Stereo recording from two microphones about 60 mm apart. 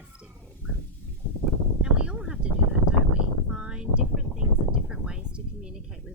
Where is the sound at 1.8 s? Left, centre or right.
Centre.